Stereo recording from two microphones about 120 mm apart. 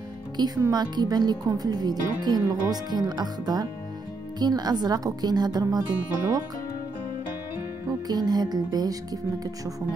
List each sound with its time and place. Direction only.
0.4 s speech: 35° right (ahead or behind)
8.1 s speech: 35° right (ahead or behind)